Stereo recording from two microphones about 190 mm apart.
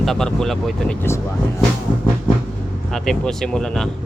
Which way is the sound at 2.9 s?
Centre (ahead or behind).